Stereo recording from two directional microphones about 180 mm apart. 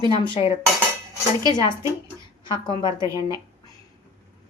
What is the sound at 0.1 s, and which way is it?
Cutlery, 30° left (ahead or behind).